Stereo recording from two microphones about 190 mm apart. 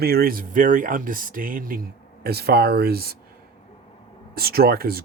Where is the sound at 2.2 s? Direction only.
55° right (ahead or behind).